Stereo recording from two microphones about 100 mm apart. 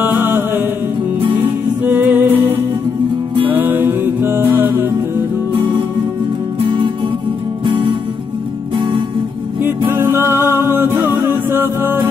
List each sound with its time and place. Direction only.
0.0 s music: 20° right (ahead or behind)
1.9 s music: 20° right (ahead or behind)
6.6 s music: 55° right (ahead or behind)
9.6 s music: 20° right (ahead or behind)